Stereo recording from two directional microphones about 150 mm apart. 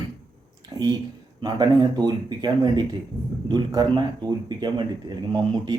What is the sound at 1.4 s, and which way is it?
Speech, 30° right (ahead or behind).